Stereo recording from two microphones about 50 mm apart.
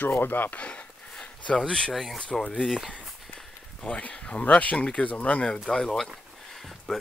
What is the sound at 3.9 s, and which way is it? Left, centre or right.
Speech, left.